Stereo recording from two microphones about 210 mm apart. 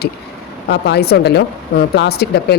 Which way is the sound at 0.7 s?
50° left (ahead or behind).